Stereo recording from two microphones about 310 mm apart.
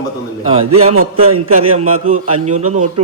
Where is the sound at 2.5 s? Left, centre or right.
Right.